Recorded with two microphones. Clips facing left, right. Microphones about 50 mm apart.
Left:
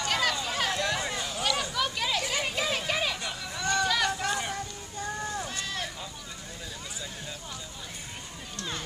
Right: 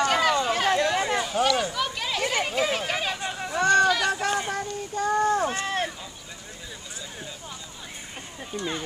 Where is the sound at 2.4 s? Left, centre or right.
Right.